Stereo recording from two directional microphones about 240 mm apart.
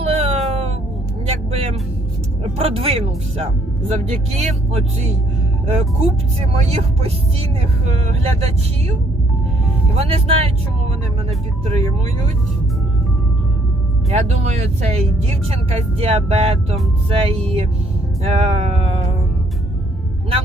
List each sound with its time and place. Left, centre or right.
0.0 s music: right
1.3 s speech: right
10.0 s speech: right
14.1 s speech: right